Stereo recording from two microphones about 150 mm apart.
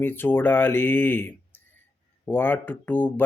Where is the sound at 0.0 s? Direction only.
15° left (ahead or behind).